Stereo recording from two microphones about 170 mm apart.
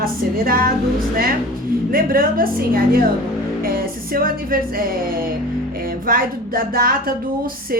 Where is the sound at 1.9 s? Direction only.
60° right (ahead or behind).